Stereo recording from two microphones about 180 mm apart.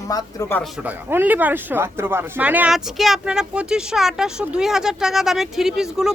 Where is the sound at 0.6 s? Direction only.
10° right (ahead or behind).